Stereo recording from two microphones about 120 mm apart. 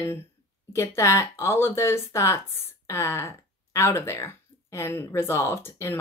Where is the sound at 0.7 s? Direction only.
25° left (ahead or behind).